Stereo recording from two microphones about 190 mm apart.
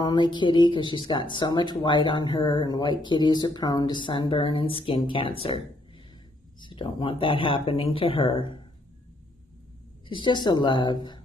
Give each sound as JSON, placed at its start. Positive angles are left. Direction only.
{"t": 0.0, "sound": "speech", "side_deg": 25}
{"t": 6.6, "sound": "speech", "side_deg": 25}
{"t": 10.0, "sound": "speech", "side_deg": 25}